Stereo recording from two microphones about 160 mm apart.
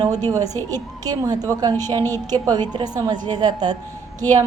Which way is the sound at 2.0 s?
15° left (ahead or behind).